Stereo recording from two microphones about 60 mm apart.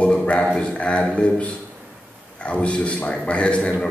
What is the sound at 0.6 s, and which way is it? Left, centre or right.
A man's voice, centre.